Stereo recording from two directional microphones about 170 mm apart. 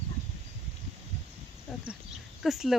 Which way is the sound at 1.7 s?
Centre (ahead or behind).